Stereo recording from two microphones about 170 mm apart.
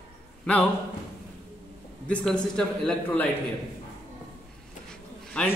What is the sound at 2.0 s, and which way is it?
A man's voice, 5° left (ahead or behind).